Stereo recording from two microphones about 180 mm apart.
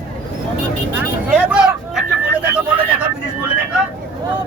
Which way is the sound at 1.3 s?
5° right (ahead or behind).